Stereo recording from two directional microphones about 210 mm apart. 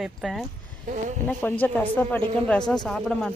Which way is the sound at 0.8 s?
35° right (ahead or behind).